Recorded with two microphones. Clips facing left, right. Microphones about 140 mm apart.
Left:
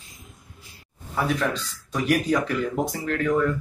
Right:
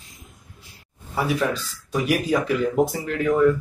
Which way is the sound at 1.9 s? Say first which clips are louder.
Right 1 dB; 5° right (ahead or behind).